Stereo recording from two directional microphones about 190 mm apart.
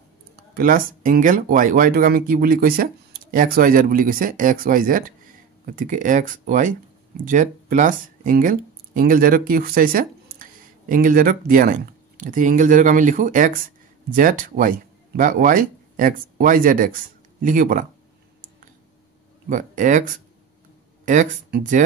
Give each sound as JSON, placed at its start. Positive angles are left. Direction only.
{"t": 0.6, "sound": "speech", "side_deg": -45}
{"t": 19.5, "sound": "speech", "side_deg": -45}